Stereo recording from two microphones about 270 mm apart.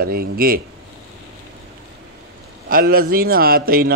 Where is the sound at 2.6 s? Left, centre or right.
Right.